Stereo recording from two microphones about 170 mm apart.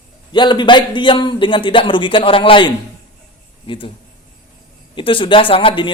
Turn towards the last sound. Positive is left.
turn(degrees=30)  # may be behind; listen again after turning